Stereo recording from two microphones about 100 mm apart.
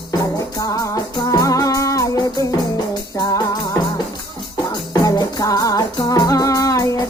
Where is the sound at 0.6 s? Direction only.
35° left (ahead or behind).